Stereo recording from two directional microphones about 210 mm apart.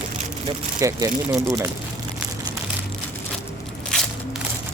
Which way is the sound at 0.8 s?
15° right (ahead or behind).